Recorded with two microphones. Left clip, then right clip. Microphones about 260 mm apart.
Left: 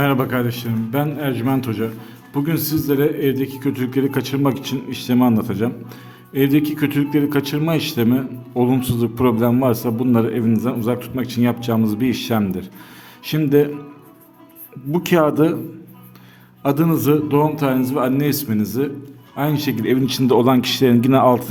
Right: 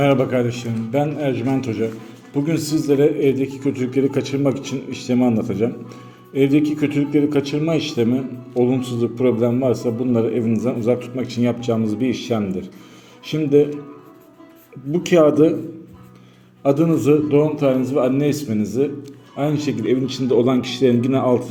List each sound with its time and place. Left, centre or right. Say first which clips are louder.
0.0 s a man's voice: right 2 dB; centre
14.9 s a man's voice: right 2 dB; centre
16.6 s a man's voice: right 2 dB; left